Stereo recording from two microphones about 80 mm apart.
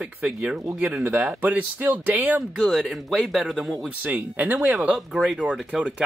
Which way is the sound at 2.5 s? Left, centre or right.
Centre.